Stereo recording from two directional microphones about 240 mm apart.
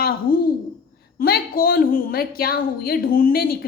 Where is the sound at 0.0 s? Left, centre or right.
Left.